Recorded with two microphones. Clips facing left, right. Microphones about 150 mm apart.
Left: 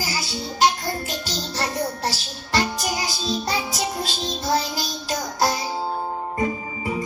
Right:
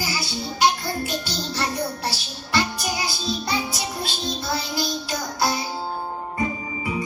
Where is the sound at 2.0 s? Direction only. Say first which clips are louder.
Left 2 dB; 40° left (ahead or behind).